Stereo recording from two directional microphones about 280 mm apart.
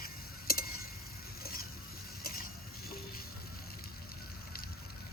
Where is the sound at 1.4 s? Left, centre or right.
Left.